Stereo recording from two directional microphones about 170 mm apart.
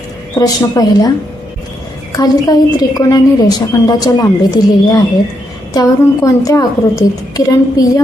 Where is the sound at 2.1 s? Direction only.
20° left (ahead or behind).